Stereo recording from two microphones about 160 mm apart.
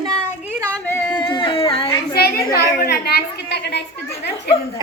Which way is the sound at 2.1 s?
75° left (ahead or behind).